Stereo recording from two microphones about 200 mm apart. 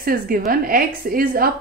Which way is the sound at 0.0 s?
45° right (ahead or behind).